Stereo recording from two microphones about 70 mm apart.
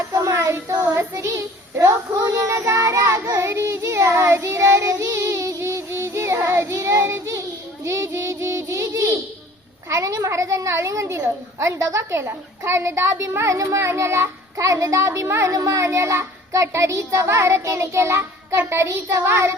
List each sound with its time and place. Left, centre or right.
0.1 s child singing: right
1.8 s a child's voice: right
3.2 s child singing: right
9.9 s a child's voice: right